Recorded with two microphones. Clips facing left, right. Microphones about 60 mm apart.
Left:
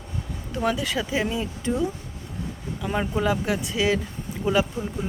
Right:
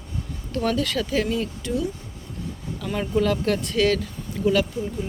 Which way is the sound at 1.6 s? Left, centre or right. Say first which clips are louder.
Left 1 dB; left.